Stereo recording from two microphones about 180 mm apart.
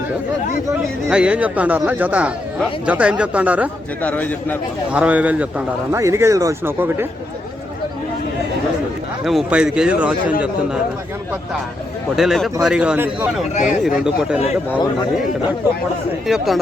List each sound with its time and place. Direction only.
0.7 s speech: 5° right (ahead or behind)
4.0 s a man's voice: 10° left (ahead or behind)
4.9 s speech: 5° right (ahead or behind)
9.2 s a man's voice: 5° right (ahead or behind)
12.1 s a man's voice: centre (ahead or behind)
13.5 s speech: 40° left (ahead or behind)
13.8 s a man's voice: 5° right (ahead or behind)
16.2 s a man's voice: centre (ahead or behind)